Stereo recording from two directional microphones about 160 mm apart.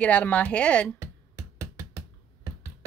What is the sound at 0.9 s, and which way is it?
Music, 20° right (ahead or behind).